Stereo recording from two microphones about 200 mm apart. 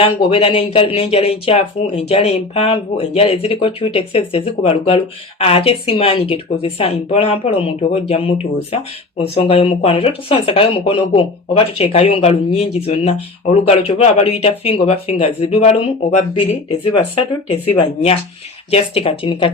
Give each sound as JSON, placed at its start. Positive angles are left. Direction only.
{"t": 0.0, "sound": "speech", "side_deg": 30}